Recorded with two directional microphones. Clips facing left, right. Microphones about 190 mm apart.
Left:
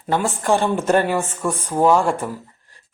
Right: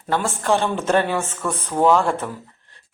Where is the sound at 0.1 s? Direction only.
15° left (ahead or behind).